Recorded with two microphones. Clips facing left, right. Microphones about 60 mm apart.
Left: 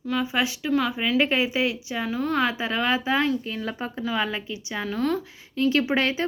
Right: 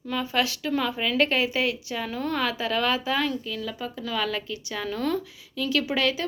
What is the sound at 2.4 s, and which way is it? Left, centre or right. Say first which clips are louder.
Speech: left 1 dB; left.